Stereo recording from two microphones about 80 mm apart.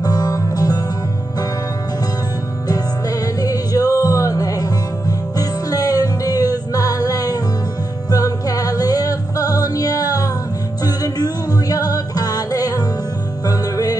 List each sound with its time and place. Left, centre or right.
0.0 s music: left
3.3 s music: left